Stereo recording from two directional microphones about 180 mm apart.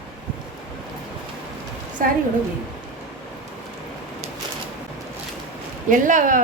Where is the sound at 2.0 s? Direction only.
50° right (ahead or behind).